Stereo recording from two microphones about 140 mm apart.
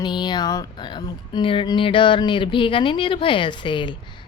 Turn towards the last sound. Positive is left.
turn(degrees=35)  # may be behind; listen again after turning